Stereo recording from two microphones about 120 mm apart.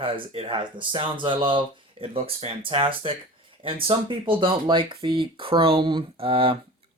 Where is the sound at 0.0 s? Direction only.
50° right (ahead or behind).